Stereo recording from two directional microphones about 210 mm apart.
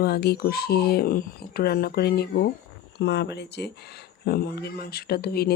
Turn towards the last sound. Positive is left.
turn(degrees=50)  # may be behind; listen again after turning